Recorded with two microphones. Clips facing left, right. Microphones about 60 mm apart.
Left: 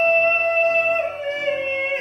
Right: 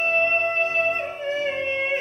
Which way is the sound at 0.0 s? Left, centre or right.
Left.